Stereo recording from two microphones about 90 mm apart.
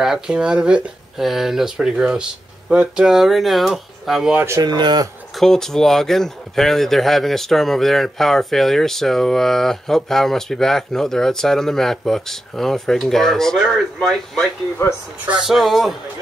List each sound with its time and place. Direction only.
0.0 s speech: 5° right (ahead or behind)
4.6 s speech: 55° right (ahead or behind)
5.4 s speech: 5° left (ahead or behind)
14.8 s speech: 30° left (ahead or behind)
15.2 s speech: 5° right (ahead or behind)